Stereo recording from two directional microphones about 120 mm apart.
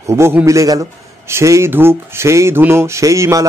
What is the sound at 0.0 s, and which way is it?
A man's voice, 20° right (ahead or behind).